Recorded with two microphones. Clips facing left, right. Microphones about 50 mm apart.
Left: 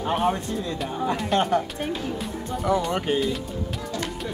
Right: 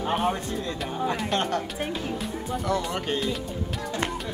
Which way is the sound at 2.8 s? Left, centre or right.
Centre.